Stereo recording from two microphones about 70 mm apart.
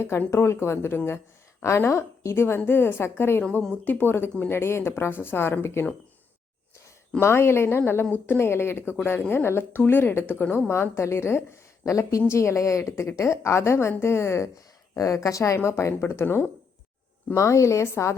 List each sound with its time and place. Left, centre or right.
0.3 s a woman's voice: left
7.2 s a woman's voice: left
14.9 s a woman's voice: left
17.3 s speech: left